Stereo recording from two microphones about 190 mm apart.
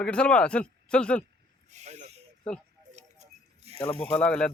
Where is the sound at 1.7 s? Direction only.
35° right (ahead or behind).